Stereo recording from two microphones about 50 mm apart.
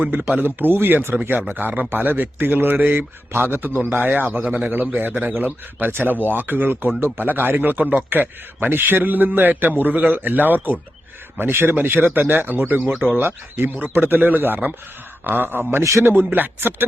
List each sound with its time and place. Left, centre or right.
0.0 s speech: right
3.3 s a man's voice: right
15.8 s a man's voice: right
16.0 s a man's voice: right